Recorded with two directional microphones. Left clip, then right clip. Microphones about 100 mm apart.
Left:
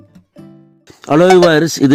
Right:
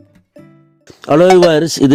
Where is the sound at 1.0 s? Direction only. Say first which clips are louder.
Right 1 dB; 25° right (ahead or behind).